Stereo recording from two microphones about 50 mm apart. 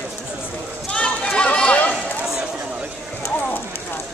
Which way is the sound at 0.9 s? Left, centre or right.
Left.